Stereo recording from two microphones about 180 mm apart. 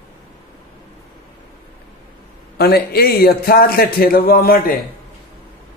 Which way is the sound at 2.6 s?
60° left (ahead or behind).